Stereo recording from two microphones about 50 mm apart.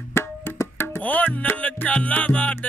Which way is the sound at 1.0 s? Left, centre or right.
Left.